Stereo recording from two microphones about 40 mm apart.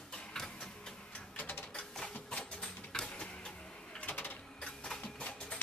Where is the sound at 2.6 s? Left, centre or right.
Centre.